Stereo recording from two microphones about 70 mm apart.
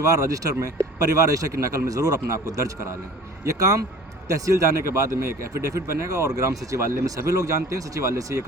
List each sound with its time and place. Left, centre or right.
0.0 s speech: right
3.4 s speech: right